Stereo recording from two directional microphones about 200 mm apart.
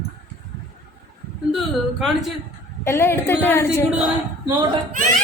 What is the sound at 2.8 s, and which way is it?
Speech, 10° left (ahead or behind).